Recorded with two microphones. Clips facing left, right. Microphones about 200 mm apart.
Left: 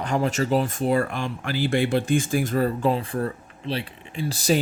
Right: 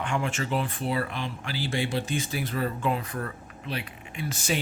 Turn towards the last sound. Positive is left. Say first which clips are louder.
# left 7 dB
turn(degrees=35)  # may be behind; listen again after turning